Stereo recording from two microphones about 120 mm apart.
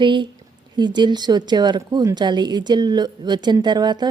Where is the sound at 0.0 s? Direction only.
40° right (ahead or behind).